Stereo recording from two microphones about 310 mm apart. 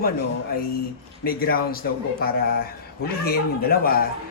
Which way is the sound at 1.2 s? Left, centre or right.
Left.